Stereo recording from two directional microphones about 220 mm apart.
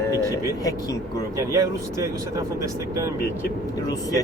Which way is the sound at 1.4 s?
15° right (ahead or behind).